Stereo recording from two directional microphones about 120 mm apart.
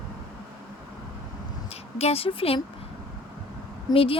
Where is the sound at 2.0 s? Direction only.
55° left (ahead or behind).